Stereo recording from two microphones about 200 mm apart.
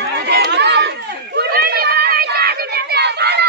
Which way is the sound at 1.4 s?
50° right (ahead or behind).